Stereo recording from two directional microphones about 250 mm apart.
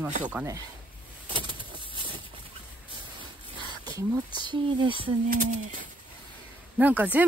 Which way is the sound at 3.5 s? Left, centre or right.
Centre.